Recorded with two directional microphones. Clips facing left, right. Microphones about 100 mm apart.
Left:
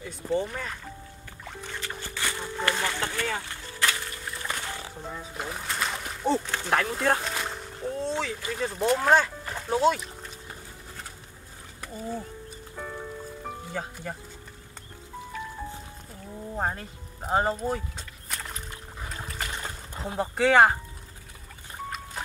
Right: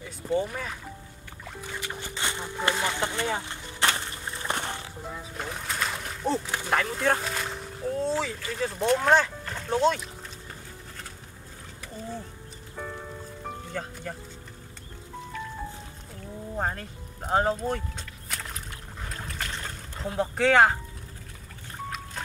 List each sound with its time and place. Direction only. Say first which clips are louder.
0.0 s speech: right 1 dB; 5° right (ahead or behind); by 3.8 s 20° right (ahead or behind)
3.8 s a sound: right 2 dB; 30° right (ahead or behind)
5.0 s speech: left 1 dB; centre (ahead or behind)
13.4 s music: right 1 dB; 5° left (ahead or behind)
16.2 s music: even; 5° left (ahead or behind)
19.0 s a sound: even; 5° left (ahead or behind)
21.8 s boat: even; 5° left (ahead or behind)